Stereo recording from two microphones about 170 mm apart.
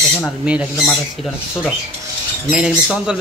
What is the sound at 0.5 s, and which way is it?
Speech, 5° right (ahead or behind).